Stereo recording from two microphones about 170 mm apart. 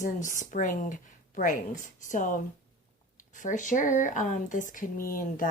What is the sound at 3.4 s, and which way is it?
Speech, 50° left (ahead or behind).